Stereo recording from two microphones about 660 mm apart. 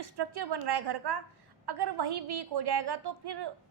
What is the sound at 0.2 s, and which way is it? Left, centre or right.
A woman's voice, right.